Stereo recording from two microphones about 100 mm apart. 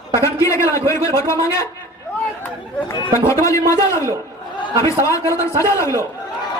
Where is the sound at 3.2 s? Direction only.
30° left (ahead or behind).